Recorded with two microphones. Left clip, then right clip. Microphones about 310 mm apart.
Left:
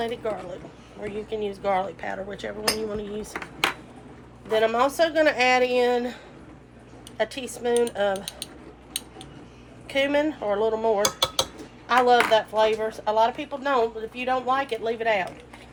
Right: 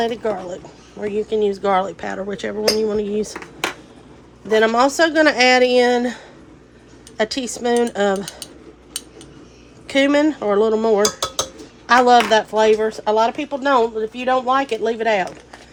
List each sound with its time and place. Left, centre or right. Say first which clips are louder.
0.0 s speech: right 7 dB; right
4.5 s a woman's voice: right 6 dB; right
9.8 s speech: right 7 dB; right